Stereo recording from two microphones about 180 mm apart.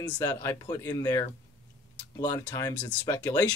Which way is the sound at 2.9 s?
15° left (ahead or behind).